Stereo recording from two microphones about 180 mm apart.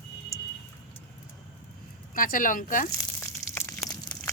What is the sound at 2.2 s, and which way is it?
Speech, 50° left (ahead or behind).